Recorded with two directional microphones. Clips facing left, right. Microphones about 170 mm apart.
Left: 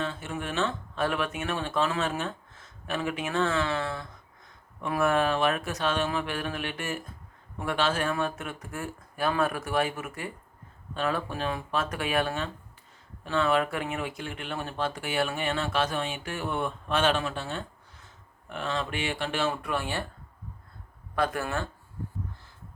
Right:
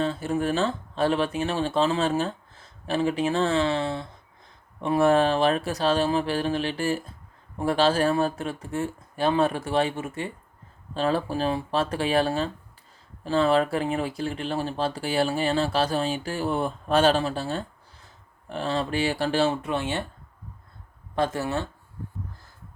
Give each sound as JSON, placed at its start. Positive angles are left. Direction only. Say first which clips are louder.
{"t": 0.0, "sound": "speech", "louder": "right 8 dB", "side_deg": -35}
{"t": 21.2, "sound": "speech", "louder": "right 3 dB", "side_deg": -25}